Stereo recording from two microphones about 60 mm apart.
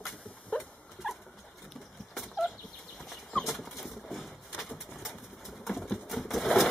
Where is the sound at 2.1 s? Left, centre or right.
Centre.